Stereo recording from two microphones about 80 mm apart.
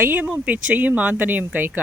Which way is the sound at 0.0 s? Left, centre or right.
Right.